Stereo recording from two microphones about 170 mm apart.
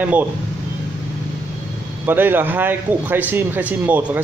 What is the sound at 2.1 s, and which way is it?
A man's voice, 10° right (ahead or behind).